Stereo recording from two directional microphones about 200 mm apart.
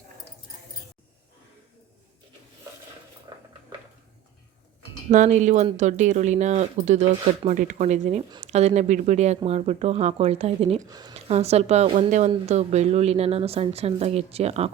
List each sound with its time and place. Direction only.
5.0 s speech: 35° right (ahead or behind)
10.8 s speech: 20° right (ahead or behind)
11.1 s speech: 30° right (ahead or behind)